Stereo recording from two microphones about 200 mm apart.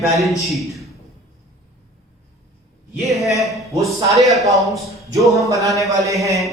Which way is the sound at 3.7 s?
15° right (ahead or behind).